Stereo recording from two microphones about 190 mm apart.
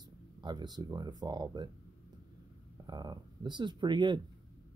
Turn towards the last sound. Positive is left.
turn(degrees=-25)  # may be behind; listen again after turning